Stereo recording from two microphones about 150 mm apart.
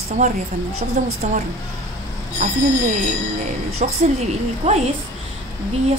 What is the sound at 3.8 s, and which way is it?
Speech, 55° right (ahead or behind).